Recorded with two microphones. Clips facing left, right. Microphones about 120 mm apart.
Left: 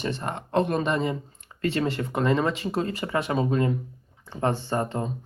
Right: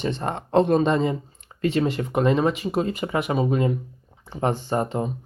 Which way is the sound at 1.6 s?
15° right (ahead or behind).